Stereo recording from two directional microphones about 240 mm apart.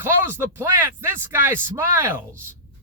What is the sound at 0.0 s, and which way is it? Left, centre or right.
Speech, centre.